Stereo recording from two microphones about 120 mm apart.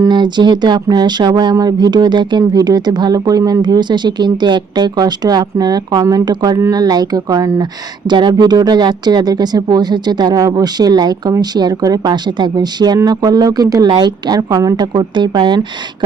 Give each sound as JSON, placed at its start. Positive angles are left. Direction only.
{"t": 0.0, "sound": "speech", "side_deg": -40}